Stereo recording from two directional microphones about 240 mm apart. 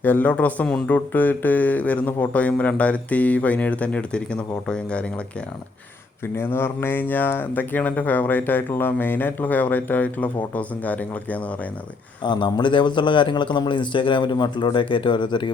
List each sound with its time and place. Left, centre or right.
0.0 s speech: centre
6.3 s speech: centre
12.2 s a man's voice: centre